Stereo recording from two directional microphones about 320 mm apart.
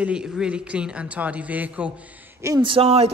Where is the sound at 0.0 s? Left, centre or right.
Centre.